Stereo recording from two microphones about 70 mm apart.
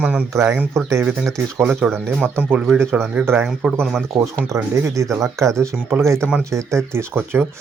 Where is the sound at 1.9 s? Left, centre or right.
Centre.